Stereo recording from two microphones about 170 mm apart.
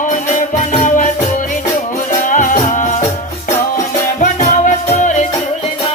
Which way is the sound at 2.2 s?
50° left (ahead or behind).